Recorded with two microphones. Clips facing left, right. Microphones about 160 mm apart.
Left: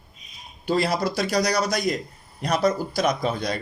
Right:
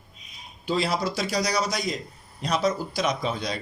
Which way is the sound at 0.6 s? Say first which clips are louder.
Left 3 dB; 50° left (ahead or behind).